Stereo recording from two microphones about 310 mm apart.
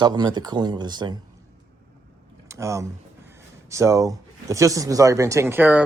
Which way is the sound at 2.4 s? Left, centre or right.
Centre.